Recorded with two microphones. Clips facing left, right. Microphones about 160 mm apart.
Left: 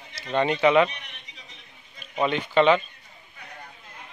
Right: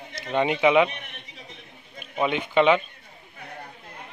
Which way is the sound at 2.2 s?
10° right (ahead or behind).